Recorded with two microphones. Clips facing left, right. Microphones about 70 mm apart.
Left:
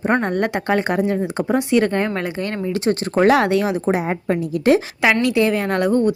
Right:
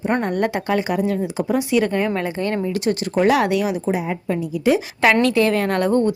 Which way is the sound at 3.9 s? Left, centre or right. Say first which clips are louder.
Left 2 dB; left.